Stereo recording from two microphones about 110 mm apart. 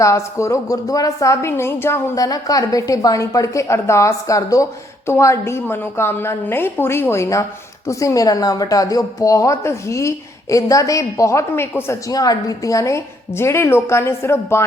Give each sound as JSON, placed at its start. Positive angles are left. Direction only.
{"t": 0.0, "sound": "speech", "side_deg": 25}